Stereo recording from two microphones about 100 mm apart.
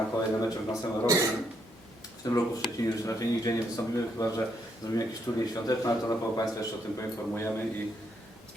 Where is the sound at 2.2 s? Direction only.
35° left (ahead or behind).